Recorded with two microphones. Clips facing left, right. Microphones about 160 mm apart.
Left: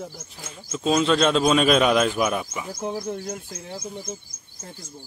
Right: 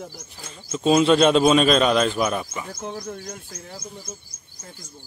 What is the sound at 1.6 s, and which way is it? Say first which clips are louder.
Speech: even; 10° left (ahead or behind).